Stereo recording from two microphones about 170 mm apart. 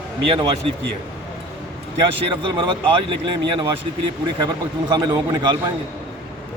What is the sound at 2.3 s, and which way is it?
A man's voice, 30° right (ahead or behind).